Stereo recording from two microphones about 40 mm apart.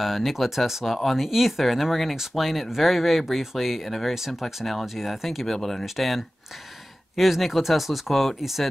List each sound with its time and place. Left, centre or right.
0.0 s speech: centre
4.4 s speech: centre
5.9 s speech: centre